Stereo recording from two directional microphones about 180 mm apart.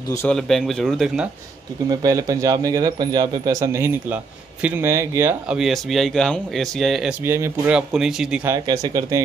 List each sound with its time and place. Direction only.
0.3 s speech: centre (ahead or behind)
1.9 s a man's voice: 20° right (ahead or behind)
5.6 s speech: centre (ahead or behind)
7.2 s speech: 15° right (ahead or behind)
8.5 s speech: 20° right (ahead or behind)